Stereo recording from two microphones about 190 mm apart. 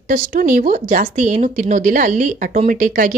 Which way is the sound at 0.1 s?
45° right (ahead or behind).